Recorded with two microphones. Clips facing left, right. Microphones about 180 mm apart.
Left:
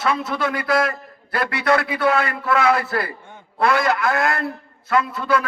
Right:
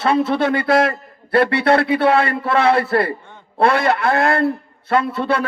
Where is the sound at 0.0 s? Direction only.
30° right (ahead or behind).